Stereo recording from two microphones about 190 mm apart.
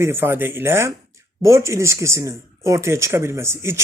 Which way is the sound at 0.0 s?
15° right (ahead or behind).